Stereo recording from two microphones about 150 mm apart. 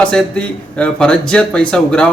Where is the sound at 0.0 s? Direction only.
5° left (ahead or behind).